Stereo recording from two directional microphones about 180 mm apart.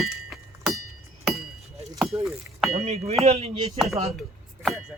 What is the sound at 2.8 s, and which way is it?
Speech, 35° right (ahead or behind).